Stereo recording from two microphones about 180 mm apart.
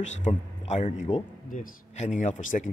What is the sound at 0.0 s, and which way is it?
Speech, 40° left (ahead or behind).